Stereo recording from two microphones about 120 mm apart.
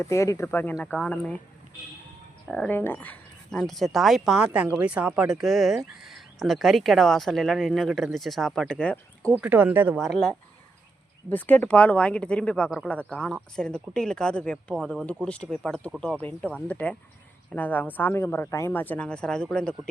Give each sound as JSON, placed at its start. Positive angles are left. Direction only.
{"t": 0.0, "sound": "speech", "side_deg": 25}
{"t": 0.9, "sound": "speech", "side_deg": 5}
{"t": 2.5, "sound": "speech", "side_deg": 5}
{"t": 2.7, "sound": "speech", "side_deg": 15}
{"t": 9.4, "sound": "speech", "side_deg": -15}
{"t": 10.0, "sound": "speech", "side_deg": 5}
{"t": 11.3, "sound": "speech", "side_deg": 15}